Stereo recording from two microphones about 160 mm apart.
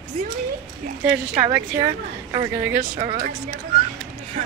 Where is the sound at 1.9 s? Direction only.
30° right (ahead or behind).